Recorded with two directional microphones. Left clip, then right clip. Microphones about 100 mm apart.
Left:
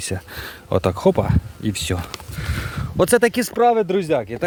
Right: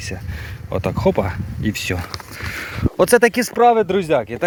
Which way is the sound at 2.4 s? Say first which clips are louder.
Right 3 dB; 25° left (ahead or behind).